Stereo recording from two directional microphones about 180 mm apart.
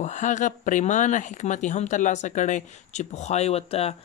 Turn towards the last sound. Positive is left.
turn(degrees=35)  # may be behind; listen again after turning